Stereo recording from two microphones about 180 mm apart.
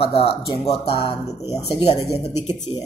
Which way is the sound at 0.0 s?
30° left (ahead or behind).